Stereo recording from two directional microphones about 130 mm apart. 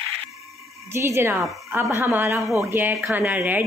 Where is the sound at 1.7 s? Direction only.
20° right (ahead or behind).